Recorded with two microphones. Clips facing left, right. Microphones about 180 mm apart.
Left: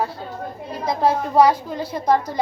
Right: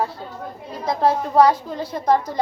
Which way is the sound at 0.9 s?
5° left (ahead or behind).